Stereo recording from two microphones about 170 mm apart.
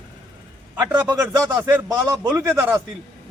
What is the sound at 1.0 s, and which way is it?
A man's voice, 20° right (ahead or behind).